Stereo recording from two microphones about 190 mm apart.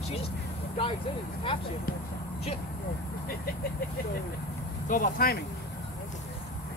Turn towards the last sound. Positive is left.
turn(degrees=50)  # may be behind; listen again after turning